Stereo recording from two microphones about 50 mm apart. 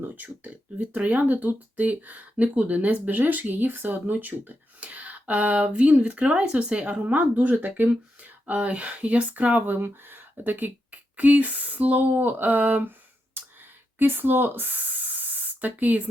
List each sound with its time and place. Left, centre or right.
0.0 s speech: right
4.8 s speech: right
12.1 s speech: right